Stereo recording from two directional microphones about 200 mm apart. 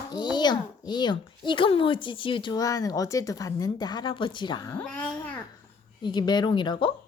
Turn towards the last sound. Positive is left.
turn(degrees=25)  # may be behind; listen again after turning